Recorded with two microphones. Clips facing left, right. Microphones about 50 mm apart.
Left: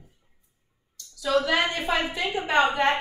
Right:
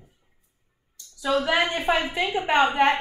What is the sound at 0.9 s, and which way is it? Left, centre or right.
A woman's voice, right.